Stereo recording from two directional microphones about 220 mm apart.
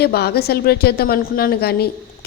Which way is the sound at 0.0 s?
45° left (ahead or behind).